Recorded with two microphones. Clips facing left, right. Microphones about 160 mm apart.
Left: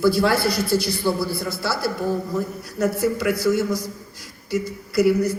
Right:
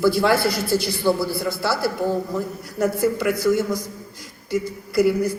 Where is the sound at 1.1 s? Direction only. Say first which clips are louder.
Right 4 dB; 15° left (ahead or behind).